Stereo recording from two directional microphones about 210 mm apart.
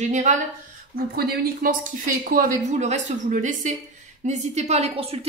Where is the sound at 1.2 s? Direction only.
45° right (ahead or behind).